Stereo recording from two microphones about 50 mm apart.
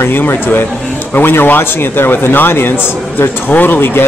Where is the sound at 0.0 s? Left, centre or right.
Left.